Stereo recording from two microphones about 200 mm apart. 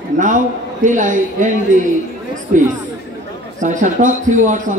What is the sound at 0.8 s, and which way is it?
A man's voice, 40° right (ahead or behind).